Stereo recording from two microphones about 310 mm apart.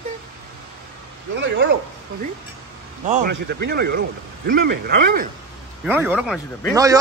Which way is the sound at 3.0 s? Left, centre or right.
Right.